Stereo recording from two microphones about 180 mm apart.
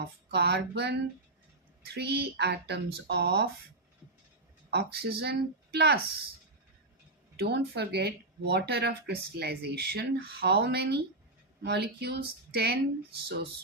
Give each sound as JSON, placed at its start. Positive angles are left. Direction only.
{"t": 0.0, "sound": "speech", "side_deg": -65}
{"t": 4.7, "sound": "speech", "side_deg": -60}
{"t": 7.3, "sound": "speech", "side_deg": -65}